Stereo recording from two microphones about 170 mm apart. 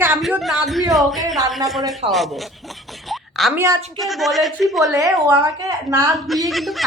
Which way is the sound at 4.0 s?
Centre (ahead or behind).